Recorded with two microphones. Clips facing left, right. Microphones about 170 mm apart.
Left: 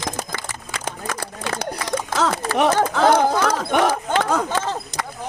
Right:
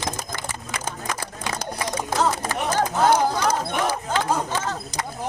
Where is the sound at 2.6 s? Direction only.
90° left; by 4.6 s 70° left (ahead or behind).